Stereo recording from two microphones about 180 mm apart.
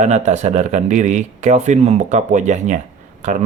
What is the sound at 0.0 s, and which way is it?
Speech, 40° right (ahead or behind).